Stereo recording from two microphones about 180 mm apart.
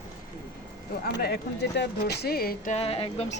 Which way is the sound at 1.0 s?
60° left (ahead or behind).